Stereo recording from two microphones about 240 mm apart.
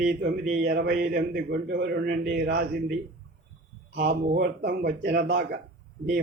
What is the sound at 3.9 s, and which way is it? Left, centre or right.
A man's voice, right.